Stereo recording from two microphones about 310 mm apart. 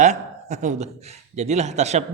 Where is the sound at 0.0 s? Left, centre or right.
Right.